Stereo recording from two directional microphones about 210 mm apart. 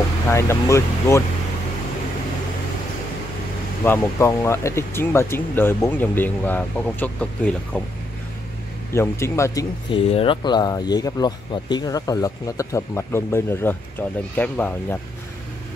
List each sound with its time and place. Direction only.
0.3 s speech: 15° left (ahead or behind)
3.8 s speech: 15° left (ahead or behind)
8.9 s speech: 10° left (ahead or behind)